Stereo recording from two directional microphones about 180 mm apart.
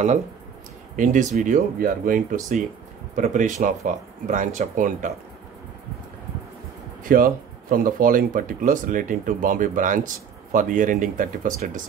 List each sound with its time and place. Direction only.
0.9 s speech: 45° right (ahead or behind)
7.0 s speech: 50° right (ahead or behind)